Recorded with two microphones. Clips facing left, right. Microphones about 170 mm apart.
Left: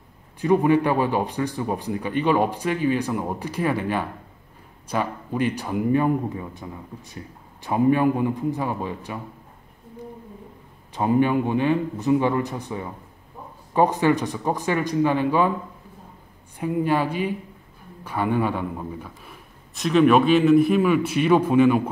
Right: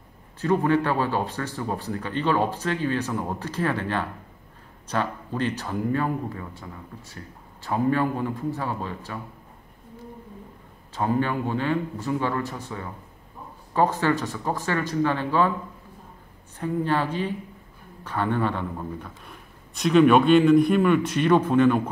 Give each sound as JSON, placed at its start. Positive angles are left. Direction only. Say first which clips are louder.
{"t": 0.4, "sound": "speech", "louder": "left 3 dB", "side_deg": 15}
{"t": 11.0, "sound": "speech", "louder": "left 5 dB", "side_deg": 15}
{"t": 16.5, "sound": "speech", "louder": "left 3 dB", "side_deg": 10}